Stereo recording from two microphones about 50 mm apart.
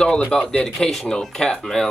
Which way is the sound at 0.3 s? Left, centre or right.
Centre.